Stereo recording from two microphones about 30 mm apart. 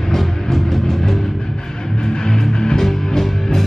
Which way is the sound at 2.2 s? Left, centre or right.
Left.